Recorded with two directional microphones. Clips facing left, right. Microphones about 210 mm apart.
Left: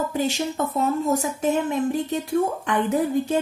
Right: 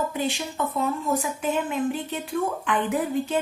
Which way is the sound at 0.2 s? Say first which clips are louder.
Left 3 dB; 40° left (ahead or behind).